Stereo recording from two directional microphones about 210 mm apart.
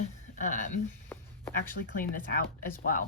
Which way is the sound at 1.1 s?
10° left (ahead or behind).